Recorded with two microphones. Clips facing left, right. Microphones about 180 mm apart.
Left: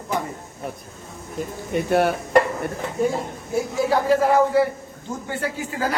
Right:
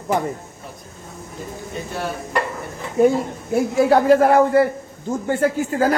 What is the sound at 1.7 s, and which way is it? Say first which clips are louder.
Speech: left 9 dB; 65° left (ahead or behind).